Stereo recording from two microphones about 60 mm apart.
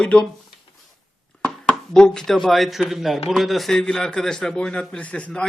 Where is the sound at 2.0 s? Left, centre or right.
Centre.